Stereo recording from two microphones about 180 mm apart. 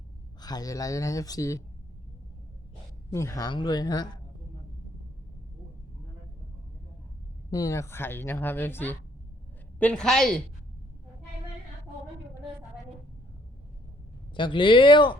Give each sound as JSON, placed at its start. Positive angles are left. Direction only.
{"t": 0.3, "sound": "speech", "side_deg": 20}
{"t": 3.1, "sound": "speech", "side_deg": 15}
{"t": 7.5, "sound": "a woman's voice", "side_deg": 20}
{"t": 14.3, "sound": "speech", "side_deg": 25}